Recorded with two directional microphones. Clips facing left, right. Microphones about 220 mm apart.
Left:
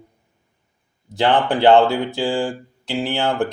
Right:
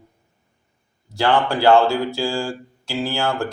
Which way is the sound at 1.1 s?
20° left (ahead or behind).